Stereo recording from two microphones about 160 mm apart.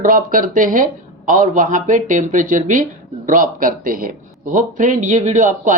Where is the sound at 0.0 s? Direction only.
60° right (ahead or behind).